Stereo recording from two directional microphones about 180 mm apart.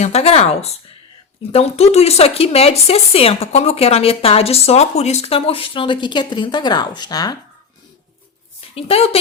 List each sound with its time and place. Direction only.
0.0 s speech: 35° left (ahead or behind)
8.7 s a woman's voice: 35° left (ahead or behind)